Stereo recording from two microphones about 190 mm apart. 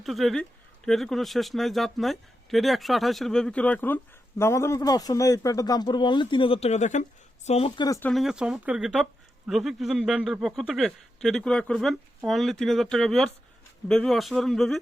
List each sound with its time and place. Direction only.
0.0 s speech: centre (ahead or behind); by 7.9 s 30° left (ahead or behind)
7.9 s speech: 15° left (ahead or behind)
8.1 s speech: centre (ahead or behind)